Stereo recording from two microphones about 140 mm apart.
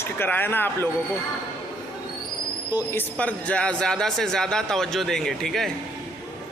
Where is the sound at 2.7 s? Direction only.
20° left (ahead or behind).